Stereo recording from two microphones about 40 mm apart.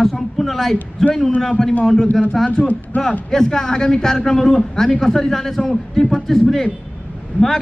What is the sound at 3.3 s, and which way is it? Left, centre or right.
A man's voice, centre.